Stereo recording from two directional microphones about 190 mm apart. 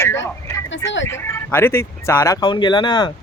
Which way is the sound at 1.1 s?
15° left (ahead or behind).